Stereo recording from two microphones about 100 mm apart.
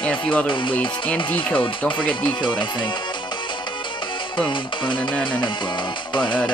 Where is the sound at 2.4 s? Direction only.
50° left (ahead or behind).